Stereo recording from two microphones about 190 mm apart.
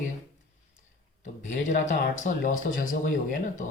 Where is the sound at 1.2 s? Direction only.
40° left (ahead or behind).